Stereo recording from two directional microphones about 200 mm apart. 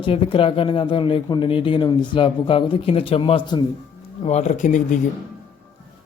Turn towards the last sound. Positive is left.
turn(degrees=40)  # may be behind; listen again after turning